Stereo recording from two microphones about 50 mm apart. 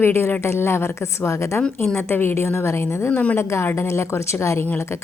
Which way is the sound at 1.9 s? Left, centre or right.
Left.